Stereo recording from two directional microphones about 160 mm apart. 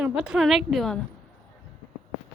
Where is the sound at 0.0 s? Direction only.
5° right (ahead or behind).